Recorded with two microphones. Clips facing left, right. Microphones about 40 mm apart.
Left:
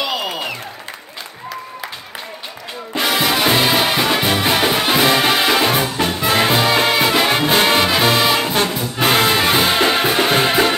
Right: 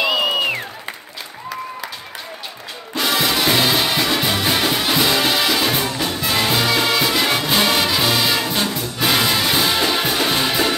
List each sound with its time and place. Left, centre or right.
0.0 s music: right
2.9 s music: left